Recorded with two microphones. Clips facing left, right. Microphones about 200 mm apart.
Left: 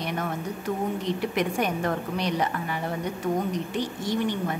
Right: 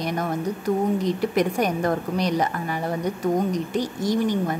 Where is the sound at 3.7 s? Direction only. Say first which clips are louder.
Right 5 dB; 40° right (ahead or behind).